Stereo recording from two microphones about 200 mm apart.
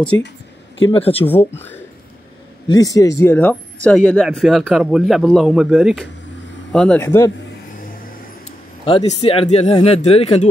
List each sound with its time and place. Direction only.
0.8 s speech: 30° left (ahead or behind)
1.2 s speech: 10° left (ahead or behind)
8.8 s speech: 30° left (ahead or behind)